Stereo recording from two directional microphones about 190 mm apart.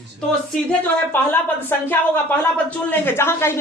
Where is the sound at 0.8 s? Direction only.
10° left (ahead or behind).